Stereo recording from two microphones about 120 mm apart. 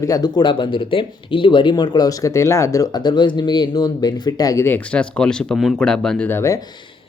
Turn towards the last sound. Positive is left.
turn(degrees=20)  # may be behind; listen again after turning